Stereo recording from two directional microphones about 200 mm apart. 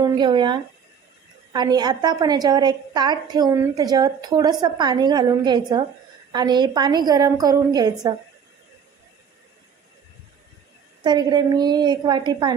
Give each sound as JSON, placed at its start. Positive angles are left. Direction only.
{"t": 0.0, "sound": "a woman's voice", "side_deg": -20}
{"t": 11.0, "sound": "a woman's voice", "side_deg": -20}